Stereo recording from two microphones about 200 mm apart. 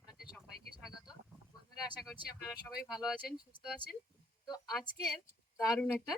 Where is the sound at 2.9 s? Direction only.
5° right (ahead or behind).